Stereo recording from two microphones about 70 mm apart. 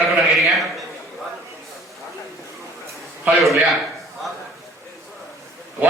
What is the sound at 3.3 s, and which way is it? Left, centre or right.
Speech, centre.